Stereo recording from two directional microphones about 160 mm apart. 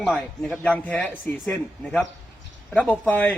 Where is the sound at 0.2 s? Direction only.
5° left (ahead or behind).